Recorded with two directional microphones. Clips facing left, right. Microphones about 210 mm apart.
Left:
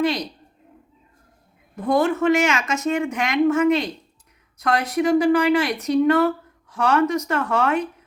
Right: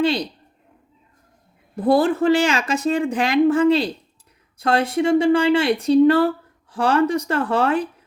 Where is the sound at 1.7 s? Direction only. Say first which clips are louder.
Right 3 dB; 35° right (ahead or behind).